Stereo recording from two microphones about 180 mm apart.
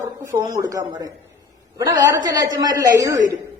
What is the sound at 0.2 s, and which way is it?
A man's voice, 20° right (ahead or behind).